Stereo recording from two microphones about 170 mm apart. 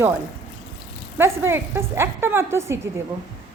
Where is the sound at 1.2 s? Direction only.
15° right (ahead or behind).